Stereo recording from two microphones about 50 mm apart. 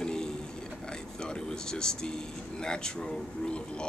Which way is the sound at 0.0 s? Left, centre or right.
Centre.